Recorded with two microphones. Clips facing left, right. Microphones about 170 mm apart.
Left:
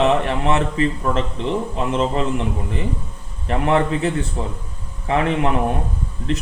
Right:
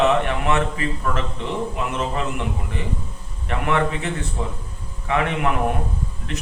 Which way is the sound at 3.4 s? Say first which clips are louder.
Left 4 dB; 35° left (ahead or behind).